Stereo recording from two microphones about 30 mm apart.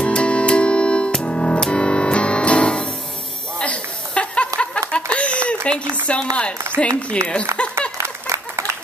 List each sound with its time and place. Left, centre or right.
0.0 s music: left
3.6 s chuckle: left
6.0 s speech: left